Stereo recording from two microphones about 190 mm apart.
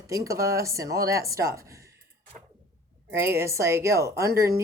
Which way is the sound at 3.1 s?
15° right (ahead or behind).